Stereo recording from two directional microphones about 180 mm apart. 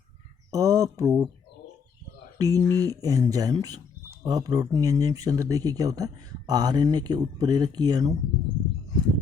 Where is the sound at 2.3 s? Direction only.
20° right (ahead or behind).